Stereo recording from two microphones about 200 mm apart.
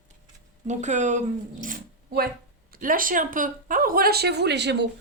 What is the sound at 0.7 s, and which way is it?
Speech, 35° right (ahead or behind).